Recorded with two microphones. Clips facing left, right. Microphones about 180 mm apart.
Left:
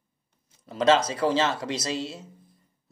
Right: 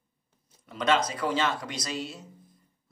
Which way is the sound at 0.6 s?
30° left (ahead or behind).